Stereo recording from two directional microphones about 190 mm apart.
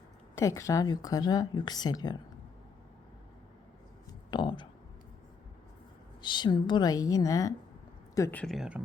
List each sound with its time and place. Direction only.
0.3 s speech: 15° left (ahead or behind)
4.3 s speech: 25° left (ahead or behind)
6.2 s speech: 25° left (ahead or behind); by 8.8 s 5° right (ahead or behind)